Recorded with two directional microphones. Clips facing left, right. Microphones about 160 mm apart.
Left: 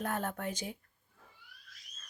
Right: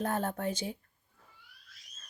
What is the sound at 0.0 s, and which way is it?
Speech, 30° right (ahead or behind).